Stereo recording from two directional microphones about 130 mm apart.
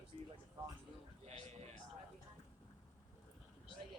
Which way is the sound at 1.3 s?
55° right (ahead or behind).